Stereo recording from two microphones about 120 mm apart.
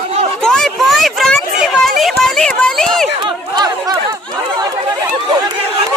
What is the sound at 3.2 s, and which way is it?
Chatter, 35° right (ahead or behind).